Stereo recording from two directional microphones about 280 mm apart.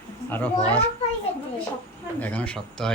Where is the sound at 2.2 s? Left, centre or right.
Centre.